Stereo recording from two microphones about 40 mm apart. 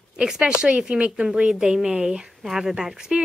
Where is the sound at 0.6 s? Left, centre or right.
Right.